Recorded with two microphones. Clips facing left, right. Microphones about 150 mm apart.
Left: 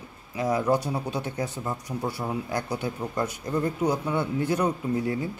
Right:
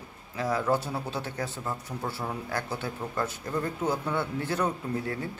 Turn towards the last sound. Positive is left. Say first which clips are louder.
# left 5 dB
turn(degrees=15)  # may be behind; listen again after turning